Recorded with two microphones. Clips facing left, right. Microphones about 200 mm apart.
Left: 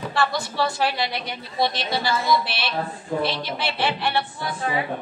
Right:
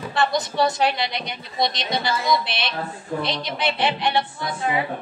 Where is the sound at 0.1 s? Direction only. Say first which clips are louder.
Right 3 dB; 20° right (ahead or behind).